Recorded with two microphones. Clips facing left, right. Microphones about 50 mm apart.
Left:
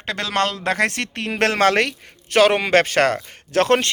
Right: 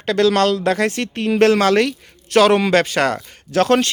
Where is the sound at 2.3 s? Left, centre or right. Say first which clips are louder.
Right 2 dB; left.